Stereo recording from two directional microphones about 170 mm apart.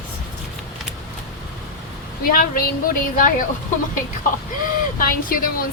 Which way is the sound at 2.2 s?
55° left (ahead or behind).